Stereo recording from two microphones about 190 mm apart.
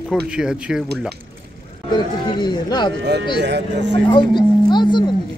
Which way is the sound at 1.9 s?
20° left (ahead or behind).